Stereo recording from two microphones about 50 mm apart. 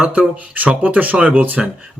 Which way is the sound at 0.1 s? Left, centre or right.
Right.